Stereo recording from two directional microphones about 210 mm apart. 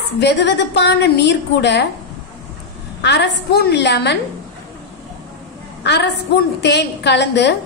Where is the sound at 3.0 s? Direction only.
55° left (ahead or behind).